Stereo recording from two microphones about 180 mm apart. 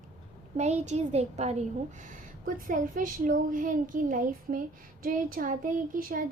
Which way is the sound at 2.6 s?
50° right (ahead or behind).